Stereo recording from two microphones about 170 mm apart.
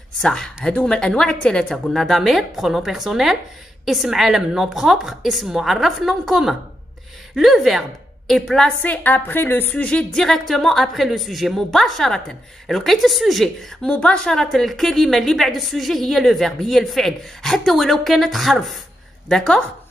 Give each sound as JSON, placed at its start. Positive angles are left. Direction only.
{"t": 0.2, "sound": "a woman's voice", "side_deg": 5}